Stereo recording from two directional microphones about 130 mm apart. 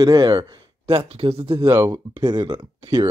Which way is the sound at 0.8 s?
45° right (ahead or behind).